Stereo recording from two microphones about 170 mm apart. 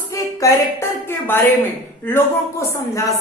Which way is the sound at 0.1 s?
20° left (ahead or behind).